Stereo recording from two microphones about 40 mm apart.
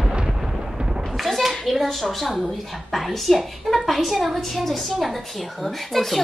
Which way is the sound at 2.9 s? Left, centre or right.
Centre.